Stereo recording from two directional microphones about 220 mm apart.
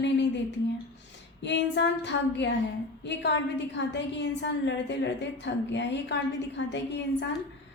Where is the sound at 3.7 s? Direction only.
55° left (ahead or behind).